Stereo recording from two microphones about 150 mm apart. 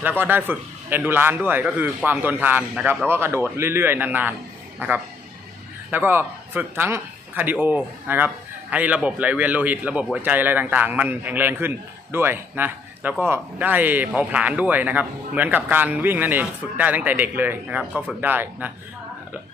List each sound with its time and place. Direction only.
0.2 s a man's voice: 15° right (ahead or behind)